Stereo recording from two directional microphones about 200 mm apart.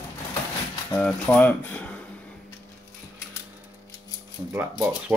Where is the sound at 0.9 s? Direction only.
5° left (ahead or behind).